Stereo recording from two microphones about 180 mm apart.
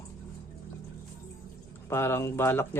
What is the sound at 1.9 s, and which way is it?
Speech, 15° left (ahead or behind).